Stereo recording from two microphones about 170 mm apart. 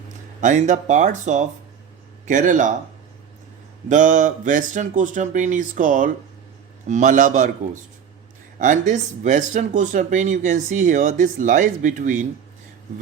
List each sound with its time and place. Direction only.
0.4 s speech: 45° right (ahead or behind)
3.8 s speech: 50° right (ahead or behind)